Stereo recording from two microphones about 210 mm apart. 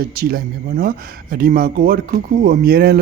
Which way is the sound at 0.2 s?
45° right (ahead or behind).